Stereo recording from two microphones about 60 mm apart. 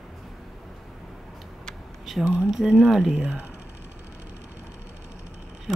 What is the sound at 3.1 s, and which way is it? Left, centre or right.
Speech, centre.